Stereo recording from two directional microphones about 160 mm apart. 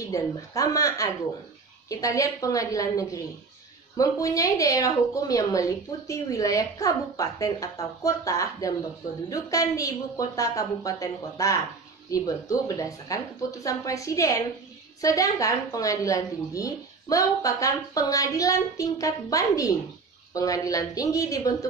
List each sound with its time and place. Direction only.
0.0 s a woman's voice: 20° left (ahead or behind)